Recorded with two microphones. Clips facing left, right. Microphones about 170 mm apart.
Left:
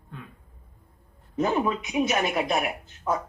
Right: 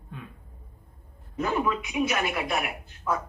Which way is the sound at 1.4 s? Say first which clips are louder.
Left 2 dB; 25° left (ahead or behind).